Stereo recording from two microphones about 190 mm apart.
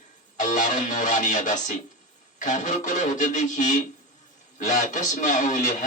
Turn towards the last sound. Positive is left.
turn(degrees=40)  # may be behind; listen again after turning